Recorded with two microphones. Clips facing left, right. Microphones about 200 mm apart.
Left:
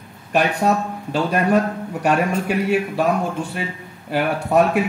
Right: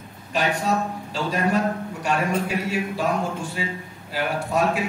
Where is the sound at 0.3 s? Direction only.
60° left (ahead or behind).